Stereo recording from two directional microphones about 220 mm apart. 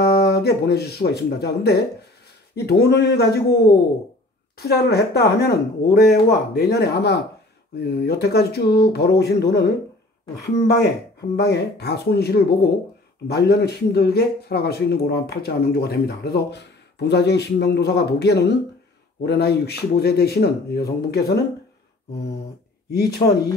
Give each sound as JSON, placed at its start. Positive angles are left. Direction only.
{"t": 0.0, "sound": "speech", "side_deg": 45}
{"t": 22.8, "sound": "speech", "side_deg": 45}